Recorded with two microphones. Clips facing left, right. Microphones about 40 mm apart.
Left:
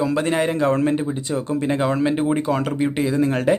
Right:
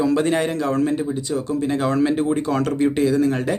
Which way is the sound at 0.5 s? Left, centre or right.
Left.